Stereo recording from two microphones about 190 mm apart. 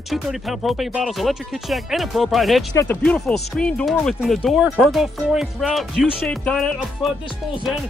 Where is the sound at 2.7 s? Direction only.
15° left (ahead or behind).